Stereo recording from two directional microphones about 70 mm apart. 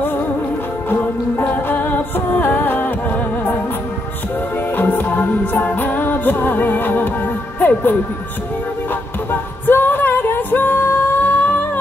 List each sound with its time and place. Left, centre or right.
0.8 s music: left
4.7 s music: left
7.6 s speech: left
9.3 s singing: left